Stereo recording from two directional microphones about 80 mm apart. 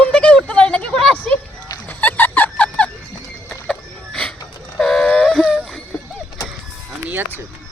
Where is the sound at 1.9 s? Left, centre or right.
Left.